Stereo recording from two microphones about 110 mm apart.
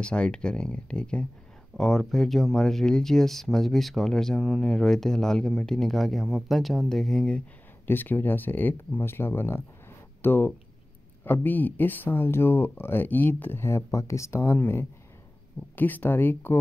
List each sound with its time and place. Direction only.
0.0 s speech: 10° left (ahead or behind)